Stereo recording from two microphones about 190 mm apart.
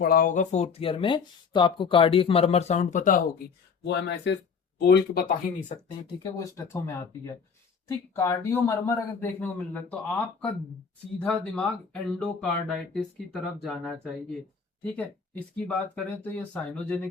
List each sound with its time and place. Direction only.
0.0 s speech: 50° left (ahead or behind)
6.2 s a man's voice: 15° left (ahead or behind)